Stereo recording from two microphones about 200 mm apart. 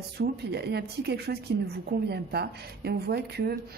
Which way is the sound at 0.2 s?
55° right (ahead or behind).